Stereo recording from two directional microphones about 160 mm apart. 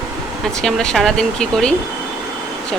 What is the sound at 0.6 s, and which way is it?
A woman's voice, 5° left (ahead or behind).